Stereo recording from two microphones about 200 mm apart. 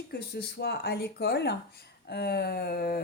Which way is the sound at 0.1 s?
50° left (ahead or behind).